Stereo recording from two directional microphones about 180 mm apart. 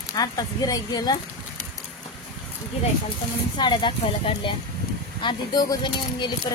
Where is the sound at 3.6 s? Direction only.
25° left (ahead or behind).